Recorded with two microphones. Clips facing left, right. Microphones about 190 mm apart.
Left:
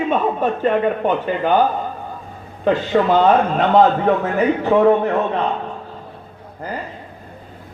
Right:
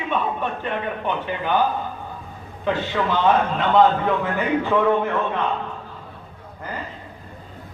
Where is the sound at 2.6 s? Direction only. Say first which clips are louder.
Left 7 dB; 45° left (ahead or behind).